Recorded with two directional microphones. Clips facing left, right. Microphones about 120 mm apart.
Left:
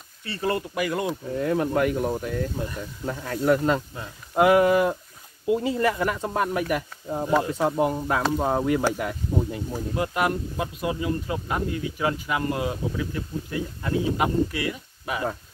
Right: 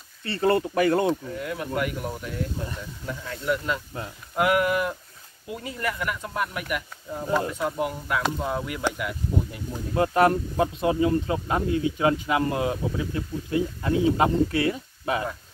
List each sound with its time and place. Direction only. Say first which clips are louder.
0.3 s speech: right 4 dB; 30° right (ahead or behind)
1.3 s speech: left 6 dB; 35° left (ahead or behind)
4.4 s speech: left 5 dB; 25° left (ahead or behind)
9.9 s speech: right 6 dB; 30° right (ahead or behind)